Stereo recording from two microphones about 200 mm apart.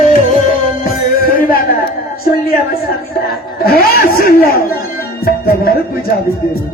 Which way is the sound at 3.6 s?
50° left (ahead or behind).